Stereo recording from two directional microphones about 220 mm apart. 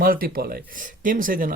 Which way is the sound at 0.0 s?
40° right (ahead or behind).